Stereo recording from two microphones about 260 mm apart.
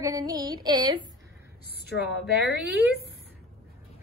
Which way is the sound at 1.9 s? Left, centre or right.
Left.